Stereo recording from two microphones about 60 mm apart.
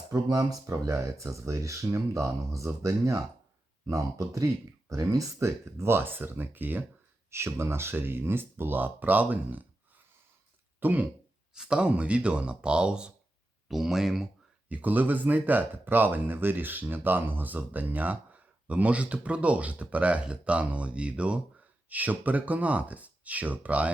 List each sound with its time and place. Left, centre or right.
0.1 s speech: right
0.7 s speech: right
7.3 s speech: right
10.8 s speech: right
11.5 s speech: centre
13.7 s speech: centre
14.7 s speech: right